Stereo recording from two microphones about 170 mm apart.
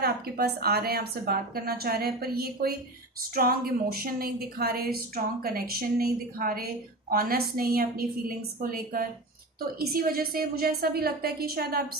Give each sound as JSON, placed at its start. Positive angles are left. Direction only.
{"t": 0.0, "sound": "a woman's voice", "side_deg": -65}